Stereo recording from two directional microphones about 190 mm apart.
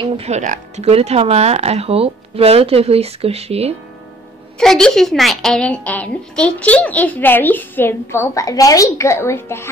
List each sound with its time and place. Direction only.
0.0 s speech: 35° right (ahead or behind)
4.6 s a woman's voice: 5° left (ahead or behind)